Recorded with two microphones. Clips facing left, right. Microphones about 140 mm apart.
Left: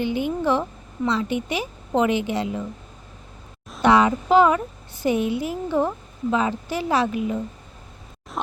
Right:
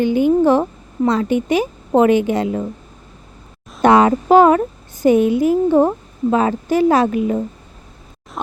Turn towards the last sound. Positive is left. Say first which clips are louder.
# right 7 dB
turn(degrees=-50)  # may be behind; listen again after turning